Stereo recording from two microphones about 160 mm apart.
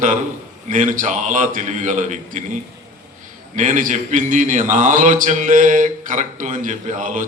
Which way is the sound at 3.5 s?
55° right (ahead or behind).